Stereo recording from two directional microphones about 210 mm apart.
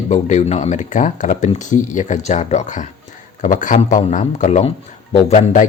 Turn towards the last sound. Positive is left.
turn(degrees=35)  # may be behind; listen again after turning